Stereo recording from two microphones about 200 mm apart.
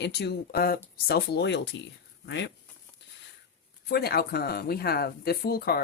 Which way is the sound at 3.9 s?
50° left (ahead or behind).